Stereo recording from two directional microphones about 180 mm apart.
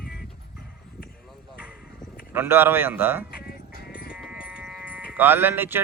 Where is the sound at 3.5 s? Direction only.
55° left (ahead or behind).